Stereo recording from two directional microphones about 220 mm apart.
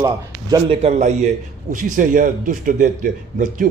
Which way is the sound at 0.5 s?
25° right (ahead or behind).